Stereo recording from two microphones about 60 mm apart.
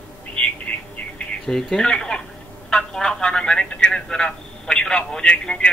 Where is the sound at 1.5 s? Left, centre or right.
Centre.